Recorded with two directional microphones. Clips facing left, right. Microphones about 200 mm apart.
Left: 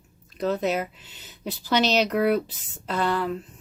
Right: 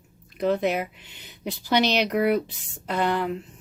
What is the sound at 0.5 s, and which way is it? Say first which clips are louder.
Speech: right 1 dB; 55° right (ahead or behind).